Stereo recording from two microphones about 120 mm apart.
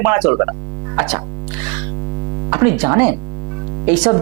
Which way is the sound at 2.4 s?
20° right (ahead or behind).